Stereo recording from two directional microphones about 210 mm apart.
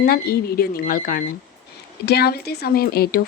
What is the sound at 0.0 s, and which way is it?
Speech, 45° left (ahead or behind).